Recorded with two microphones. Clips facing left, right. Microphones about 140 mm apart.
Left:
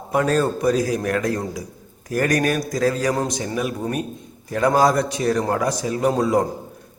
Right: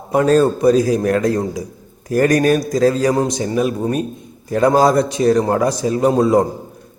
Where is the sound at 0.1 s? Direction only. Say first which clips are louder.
Right 6 dB; 30° right (ahead or behind).